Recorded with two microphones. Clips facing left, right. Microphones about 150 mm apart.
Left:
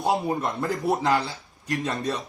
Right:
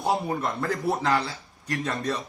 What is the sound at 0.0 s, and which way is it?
Speech, 20° left (ahead or behind).